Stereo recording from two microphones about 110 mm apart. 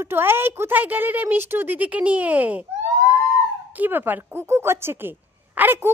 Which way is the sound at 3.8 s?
15° right (ahead or behind).